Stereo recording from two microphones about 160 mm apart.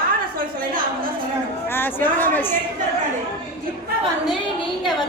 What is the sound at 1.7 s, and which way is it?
Speech, 15° left (ahead or behind).